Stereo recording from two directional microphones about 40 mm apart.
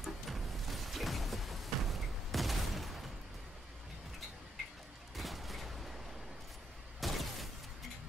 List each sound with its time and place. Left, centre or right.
0.0 s music: centre
5.1 s fusillade: centre
7.0 s a sound: centre